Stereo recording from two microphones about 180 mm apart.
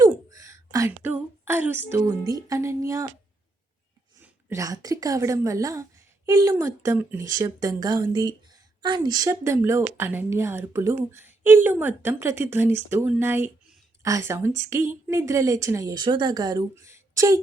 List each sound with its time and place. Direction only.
0.0 s a woman's voice: 20° right (ahead or behind)
4.2 s a woman's voice: 15° right (ahead or behind)